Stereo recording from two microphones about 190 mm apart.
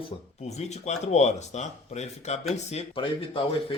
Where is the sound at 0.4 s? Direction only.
35° left (ahead or behind).